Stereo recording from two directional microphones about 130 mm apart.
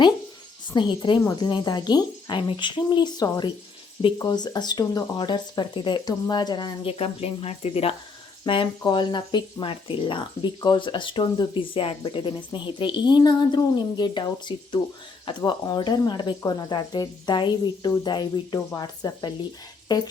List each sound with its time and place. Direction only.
0.7 s speech: 35° left (ahead or behind)
6.8 s a woman's voice: 45° left (ahead or behind)